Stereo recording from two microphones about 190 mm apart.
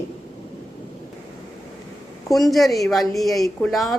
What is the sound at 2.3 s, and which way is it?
Speech, centre (ahead or behind).